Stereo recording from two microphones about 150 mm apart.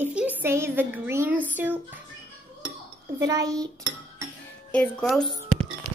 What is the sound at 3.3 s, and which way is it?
Speech, 25° right (ahead or behind).